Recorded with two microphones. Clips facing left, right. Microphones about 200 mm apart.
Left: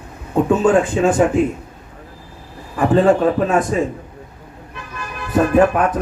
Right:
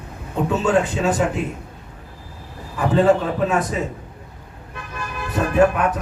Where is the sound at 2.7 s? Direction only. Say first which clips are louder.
Left 3 dB; 50° left (ahead or behind).